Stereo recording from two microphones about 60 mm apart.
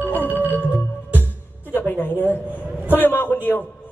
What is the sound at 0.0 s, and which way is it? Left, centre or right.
Music, left.